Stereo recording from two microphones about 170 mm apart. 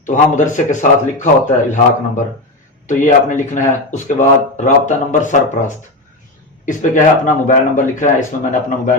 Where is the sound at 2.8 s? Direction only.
45° left (ahead or behind).